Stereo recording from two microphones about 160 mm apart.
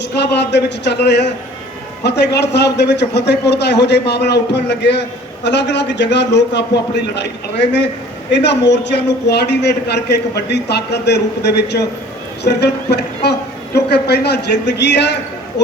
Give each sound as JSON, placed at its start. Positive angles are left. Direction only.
{"t": 0.2, "sound": "a man's voice", "side_deg": 90}